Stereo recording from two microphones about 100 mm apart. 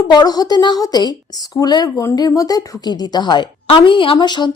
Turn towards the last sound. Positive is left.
turn(degrees=50)  # may be behind; listen again after turning